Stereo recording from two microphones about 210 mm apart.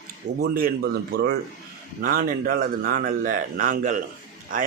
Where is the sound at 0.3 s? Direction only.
45° right (ahead or behind).